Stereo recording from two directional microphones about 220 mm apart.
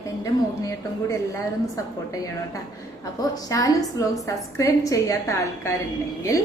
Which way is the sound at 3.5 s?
15° left (ahead or behind).